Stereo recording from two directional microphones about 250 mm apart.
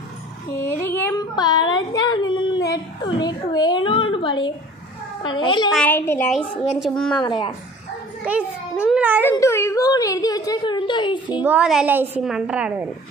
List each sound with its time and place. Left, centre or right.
0.6 s speech: centre
5.7 s a woman's voice: centre
7.2 s speech: centre
8.2 s a child's voice: centre
9.2 s speech: centre
11.4 s a woman's voice: centre